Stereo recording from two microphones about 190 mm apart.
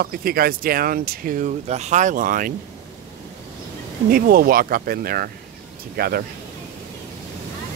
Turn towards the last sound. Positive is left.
turn(degrees=-55)  # may be behind; listen again after turning